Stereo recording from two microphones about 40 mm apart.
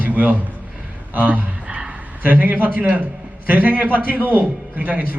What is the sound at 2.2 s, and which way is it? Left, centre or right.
A man's voice, right.